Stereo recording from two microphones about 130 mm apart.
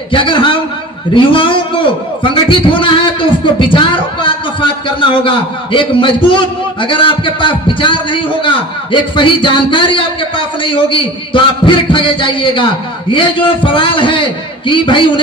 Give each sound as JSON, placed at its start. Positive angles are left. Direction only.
{"t": 0.1, "sound": "a man's voice", "side_deg": 40}